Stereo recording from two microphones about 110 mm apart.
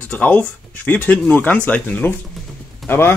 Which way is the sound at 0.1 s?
15° left (ahead or behind).